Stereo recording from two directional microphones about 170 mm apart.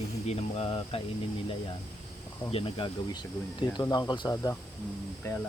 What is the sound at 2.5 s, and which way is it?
Speech, 30° left (ahead or behind).